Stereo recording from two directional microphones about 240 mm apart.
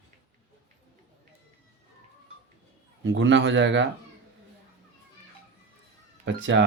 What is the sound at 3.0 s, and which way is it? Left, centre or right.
Speech, right.